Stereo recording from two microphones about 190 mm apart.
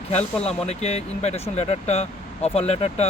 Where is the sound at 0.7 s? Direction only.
35° left (ahead or behind).